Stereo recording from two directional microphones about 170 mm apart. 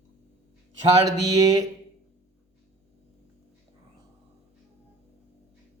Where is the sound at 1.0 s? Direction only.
20° right (ahead or behind).